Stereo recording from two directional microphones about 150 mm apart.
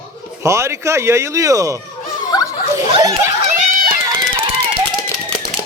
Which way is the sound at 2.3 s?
25° left (ahead or behind).